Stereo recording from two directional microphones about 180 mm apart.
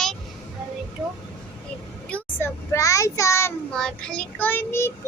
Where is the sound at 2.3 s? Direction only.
15° left (ahead or behind).